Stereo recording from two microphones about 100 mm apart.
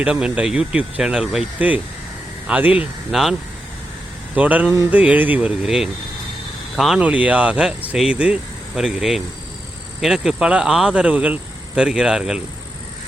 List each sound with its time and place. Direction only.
0.0 s speech: 10° right (ahead or behind)
3.1 s speech: centre (ahead or behind)
4.4 s speech: 15° right (ahead or behind)
7.0 s speech: 15° right (ahead or behind)